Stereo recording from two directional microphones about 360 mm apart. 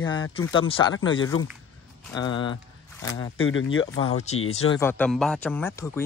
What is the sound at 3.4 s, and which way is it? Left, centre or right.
Speech, left.